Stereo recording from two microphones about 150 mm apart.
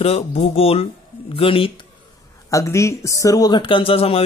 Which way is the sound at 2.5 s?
20° left (ahead or behind).